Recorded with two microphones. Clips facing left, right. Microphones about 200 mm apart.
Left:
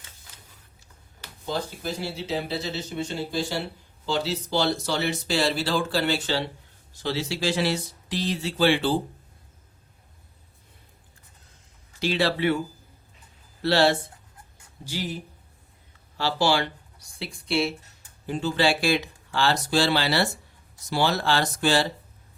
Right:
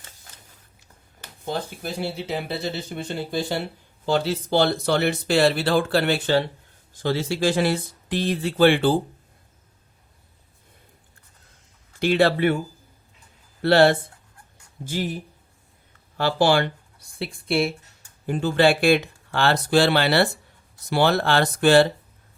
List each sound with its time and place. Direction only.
1.2 s speech: 55° right (ahead or behind)
11.9 s speech: 55° right (ahead or behind)
13.6 s speech: 55° right (ahead or behind)
16.1 s speech: 55° right (ahead or behind)